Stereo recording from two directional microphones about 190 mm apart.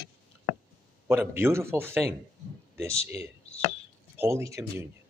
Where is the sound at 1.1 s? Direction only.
10° right (ahead or behind).